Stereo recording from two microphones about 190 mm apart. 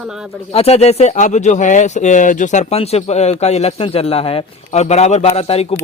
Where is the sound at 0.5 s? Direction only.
35° left (ahead or behind).